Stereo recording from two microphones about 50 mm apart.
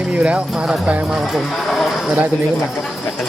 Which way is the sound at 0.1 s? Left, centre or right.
Right.